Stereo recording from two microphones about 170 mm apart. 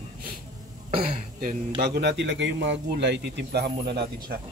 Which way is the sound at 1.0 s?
55° right (ahead or behind).